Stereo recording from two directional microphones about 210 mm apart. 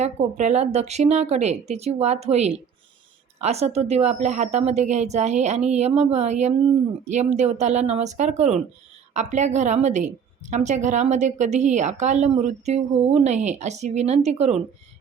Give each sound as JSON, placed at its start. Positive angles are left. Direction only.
{"t": 0.0, "sound": "a woman's voice", "side_deg": -35}